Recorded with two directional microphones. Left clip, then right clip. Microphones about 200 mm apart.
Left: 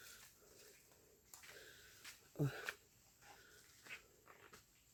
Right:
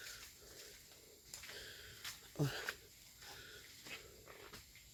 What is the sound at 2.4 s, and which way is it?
Wheeze, 10° left (ahead or behind).